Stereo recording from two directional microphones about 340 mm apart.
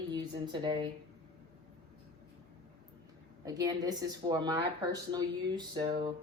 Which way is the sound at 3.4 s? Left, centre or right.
Centre.